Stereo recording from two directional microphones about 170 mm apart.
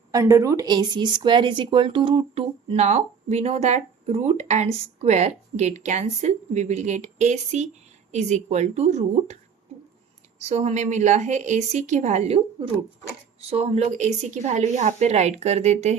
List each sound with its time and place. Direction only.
0.1 s speech: 20° right (ahead or behind); by 12.4 s 45° right (ahead or behind)
13.5 s speech: 40° right (ahead or behind)